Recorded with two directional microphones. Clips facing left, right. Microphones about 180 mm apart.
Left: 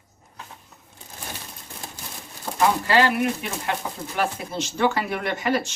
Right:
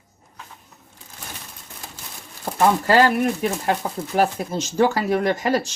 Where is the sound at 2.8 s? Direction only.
45° right (ahead or behind).